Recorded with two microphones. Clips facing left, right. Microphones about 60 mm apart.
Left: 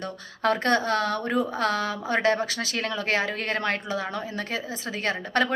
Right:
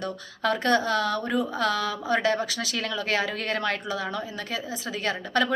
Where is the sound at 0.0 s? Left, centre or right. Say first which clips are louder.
Left 1 dB; left.